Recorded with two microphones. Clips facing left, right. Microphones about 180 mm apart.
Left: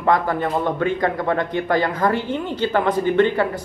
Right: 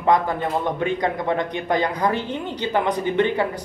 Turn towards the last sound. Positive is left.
turn(degrees=-20)  # may be behind; listen again after turning